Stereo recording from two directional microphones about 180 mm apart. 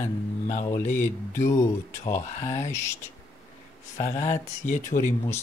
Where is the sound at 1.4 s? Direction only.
20° left (ahead or behind).